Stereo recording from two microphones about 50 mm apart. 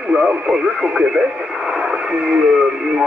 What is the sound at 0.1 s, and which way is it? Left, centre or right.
Speech, centre.